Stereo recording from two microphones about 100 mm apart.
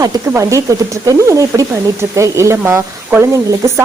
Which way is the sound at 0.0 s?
30° right (ahead or behind).